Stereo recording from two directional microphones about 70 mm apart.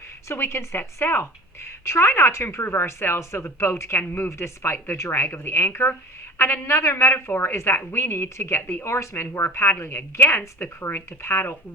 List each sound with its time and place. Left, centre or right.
0.3 s a woman's voice: left